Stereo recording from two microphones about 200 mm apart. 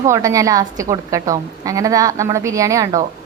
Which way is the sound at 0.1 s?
15° right (ahead or behind).